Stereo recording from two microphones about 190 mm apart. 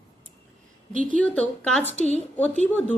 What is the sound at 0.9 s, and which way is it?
Speech, 45° right (ahead or behind).